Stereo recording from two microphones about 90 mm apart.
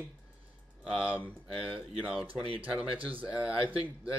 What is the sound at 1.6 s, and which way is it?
Speech, 15° right (ahead or behind).